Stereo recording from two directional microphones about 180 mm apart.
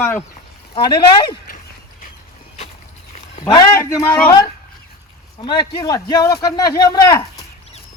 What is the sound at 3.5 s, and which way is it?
A man's voice, 20° left (ahead or behind).